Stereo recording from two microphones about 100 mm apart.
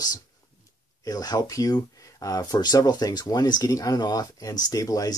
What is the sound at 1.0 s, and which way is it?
Speech, 40° left (ahead or behind).